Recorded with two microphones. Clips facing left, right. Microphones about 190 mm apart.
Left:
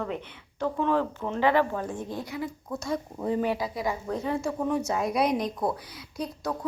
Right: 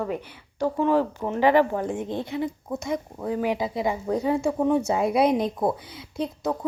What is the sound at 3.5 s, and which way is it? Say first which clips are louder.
Speech: right 3 dB; 25° right (ahead or behind).